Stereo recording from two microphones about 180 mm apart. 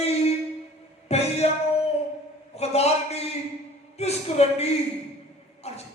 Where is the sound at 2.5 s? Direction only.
35° left (ahead or behind).